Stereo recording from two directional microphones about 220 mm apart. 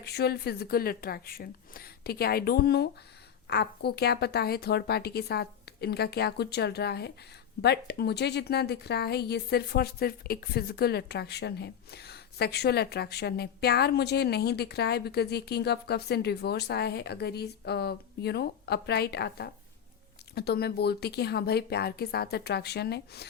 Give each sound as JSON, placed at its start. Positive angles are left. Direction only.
{"t": 0.0, "sound": "a woman's voice", "side_deg": 45}